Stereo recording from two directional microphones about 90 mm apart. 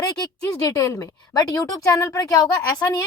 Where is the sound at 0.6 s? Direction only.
35° left (ahead or behind).